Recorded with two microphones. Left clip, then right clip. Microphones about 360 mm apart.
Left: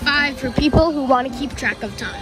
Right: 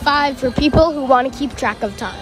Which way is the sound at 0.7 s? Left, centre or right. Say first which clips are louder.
Right 3 dB; centre.